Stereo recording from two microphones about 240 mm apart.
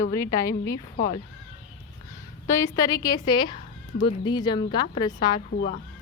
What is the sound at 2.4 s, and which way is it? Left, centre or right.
Speech, centre.